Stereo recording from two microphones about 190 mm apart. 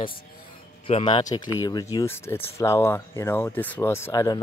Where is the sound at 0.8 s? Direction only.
25° left (ahead or behind).